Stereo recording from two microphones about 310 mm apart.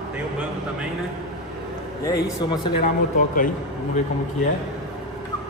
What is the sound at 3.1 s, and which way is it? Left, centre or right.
Speech, left.